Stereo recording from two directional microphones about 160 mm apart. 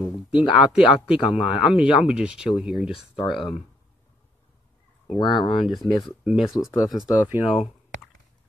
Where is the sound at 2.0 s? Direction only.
5° right (ahead or behind).